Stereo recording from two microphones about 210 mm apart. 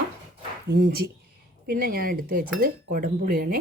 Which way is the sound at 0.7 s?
50° right (ahead or behind).